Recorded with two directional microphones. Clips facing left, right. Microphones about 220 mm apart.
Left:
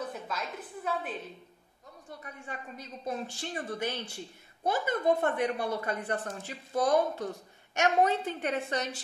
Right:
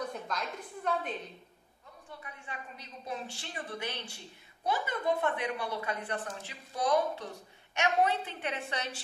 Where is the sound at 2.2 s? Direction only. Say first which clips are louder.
Left 4 dB; 45° left (ahead or behind).